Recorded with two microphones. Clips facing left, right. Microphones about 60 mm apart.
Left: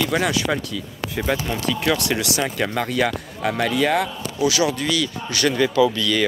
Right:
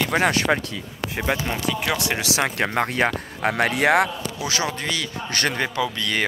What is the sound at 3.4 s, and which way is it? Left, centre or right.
Speech, right.